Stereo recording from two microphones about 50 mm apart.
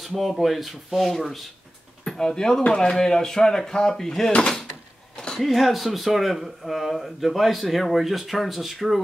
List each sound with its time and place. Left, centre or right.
0.0 s speech: centre
4.3 s speech: left
5.1 s a sound: centre
5.4 s speech: centre